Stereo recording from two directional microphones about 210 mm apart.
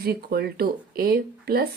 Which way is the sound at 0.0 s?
45° right (ahead or behind).